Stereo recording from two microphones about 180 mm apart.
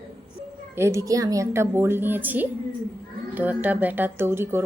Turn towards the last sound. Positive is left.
turn(degrees=-15)  # may be behind; listen again after turning